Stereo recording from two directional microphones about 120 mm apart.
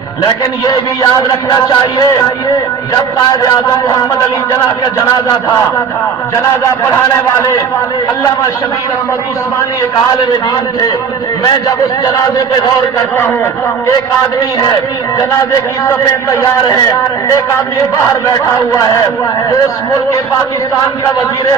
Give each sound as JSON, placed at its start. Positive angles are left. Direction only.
{"t": 0.7, "sound": "speech", "side_deg": 35}
{"t": 13.1, "sound": "a man's voice", "side_deg": 20}
{"t": 16.3, "sound": "a man's voice", "side_deg": 30}